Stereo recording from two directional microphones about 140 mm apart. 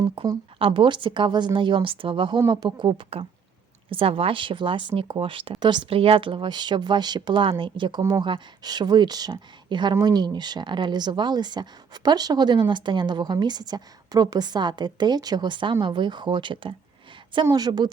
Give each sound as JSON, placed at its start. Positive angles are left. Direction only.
{"t": 0.0, "sound": "speech", "side_deg": -35}